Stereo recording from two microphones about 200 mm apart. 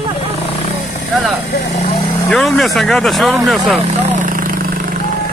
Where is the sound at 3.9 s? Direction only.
45° right (ahead or behind).